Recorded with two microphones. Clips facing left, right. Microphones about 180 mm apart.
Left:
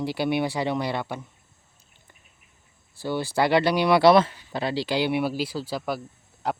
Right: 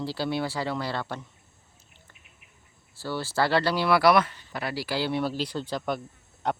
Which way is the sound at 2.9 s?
15° left (ahead or behind).